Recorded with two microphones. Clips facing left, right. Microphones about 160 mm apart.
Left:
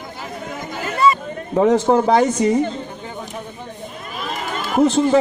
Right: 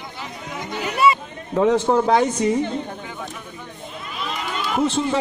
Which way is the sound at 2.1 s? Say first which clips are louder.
Left 3 dB; 40° left (ahead or behind).